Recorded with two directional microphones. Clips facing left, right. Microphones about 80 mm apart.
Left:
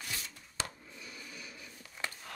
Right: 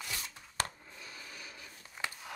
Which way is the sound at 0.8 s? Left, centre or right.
Right.